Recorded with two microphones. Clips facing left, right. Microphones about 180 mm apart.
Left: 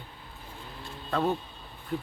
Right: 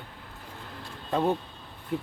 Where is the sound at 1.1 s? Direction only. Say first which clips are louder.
Right 2 dB; 20° right (ahead or behind).